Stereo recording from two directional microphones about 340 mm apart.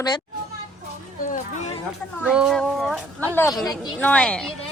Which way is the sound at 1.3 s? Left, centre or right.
Left.